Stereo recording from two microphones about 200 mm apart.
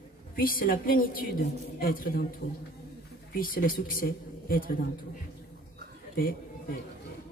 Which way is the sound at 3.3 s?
45° left (ahead or behind).